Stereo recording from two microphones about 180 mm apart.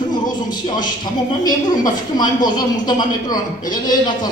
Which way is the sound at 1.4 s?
20° left (ahead or behind).